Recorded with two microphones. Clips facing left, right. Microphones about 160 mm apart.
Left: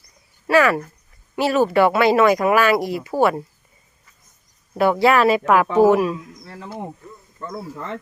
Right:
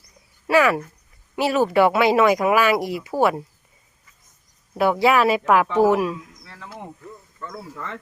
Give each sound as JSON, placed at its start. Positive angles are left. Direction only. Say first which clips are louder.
{"t": 0.4, "sound": "speech", "louder": "left 1 dB", "side_deg": -10}
{"t": 4.8, "sound": "speech", "louder": "left 2 dB", "side_deg": -10}
{"t": 7.3, "sound": "speech", "louder": "left 5 dB", "side_deg": 30}